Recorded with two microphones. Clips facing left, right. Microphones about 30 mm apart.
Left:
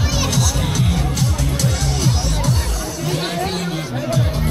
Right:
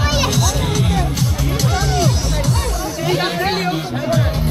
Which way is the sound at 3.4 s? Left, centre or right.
Right.